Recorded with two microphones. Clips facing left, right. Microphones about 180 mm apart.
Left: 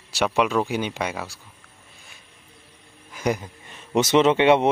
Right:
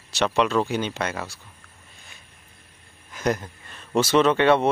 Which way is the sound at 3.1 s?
10° left (ahead or behind).